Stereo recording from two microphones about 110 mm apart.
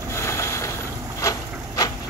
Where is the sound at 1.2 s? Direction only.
30° left (ahead or behind).